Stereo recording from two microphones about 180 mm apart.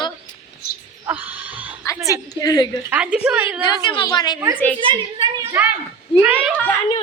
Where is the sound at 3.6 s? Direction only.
25° left (ahead or behind).